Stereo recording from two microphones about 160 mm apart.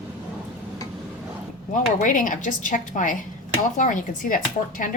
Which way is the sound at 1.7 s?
55° left (ahead or behind).